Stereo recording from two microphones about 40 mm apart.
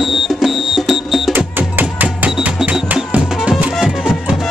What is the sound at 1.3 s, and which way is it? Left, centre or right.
Music, right.